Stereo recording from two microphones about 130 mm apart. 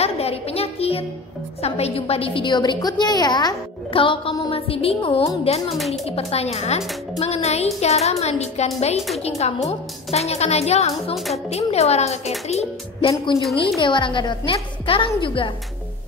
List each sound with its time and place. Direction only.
0.0 s music: 50° left (ahead or behind)
1.6 s a woman's voice: 55° left (ahead or behind)
7.2 s music: 55° left (ahead or behind)
13.7 s a woman's voice: 40° left (ahead or behind)